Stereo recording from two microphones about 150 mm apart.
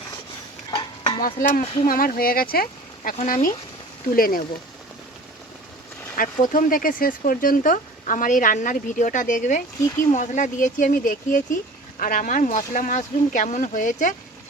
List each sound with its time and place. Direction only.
0.7 s stir: 35° left (ahead or behind)
1.2 s speech: 70° left (ahead or behind)
1.6 s speech: 40° left (ahead or behind)
1.9 s speech: 75° left (ahead or behind)
6.1 s speech: 65° left (ahead or behind)